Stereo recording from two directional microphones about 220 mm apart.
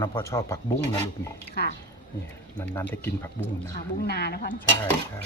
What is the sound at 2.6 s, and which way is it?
Speech, 10° left (ahead or behind).